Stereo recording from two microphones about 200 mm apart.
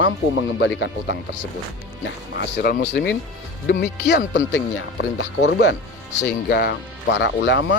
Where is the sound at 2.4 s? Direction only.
55° left (ahead or behind).